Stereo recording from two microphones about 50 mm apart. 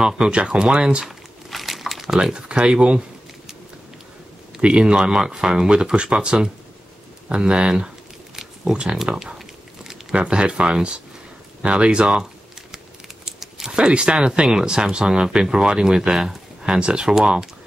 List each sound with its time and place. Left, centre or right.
0.0 s speech: centre
1.0 s crumpling: centre
2.1 s speech: centre
4.6 s speech: right
8.4 s a sound: centre
9.1 s speech: centre